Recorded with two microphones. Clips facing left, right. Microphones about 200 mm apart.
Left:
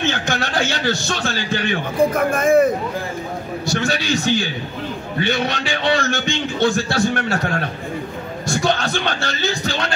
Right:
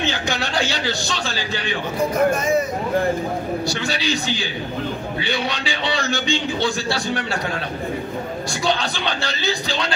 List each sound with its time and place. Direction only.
0.0 s a man's voice: 50° left (ahead or behind)